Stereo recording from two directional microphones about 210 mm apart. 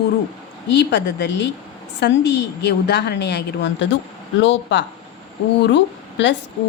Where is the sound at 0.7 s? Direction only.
55° left (ahead or behind).